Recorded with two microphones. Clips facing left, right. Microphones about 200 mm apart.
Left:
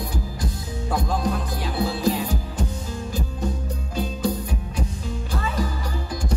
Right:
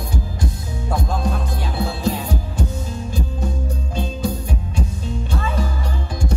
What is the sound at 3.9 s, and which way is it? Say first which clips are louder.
Music: even; 25° right (ahead or behind).